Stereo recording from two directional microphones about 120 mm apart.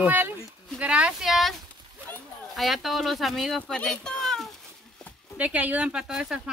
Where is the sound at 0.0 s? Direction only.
15° right (ahead or behind).